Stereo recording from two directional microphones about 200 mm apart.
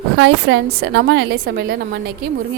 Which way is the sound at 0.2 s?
60° right (ahead or behind).